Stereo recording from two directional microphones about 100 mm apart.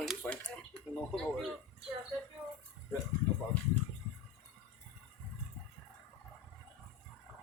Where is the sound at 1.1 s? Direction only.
5° left (ahead or behind).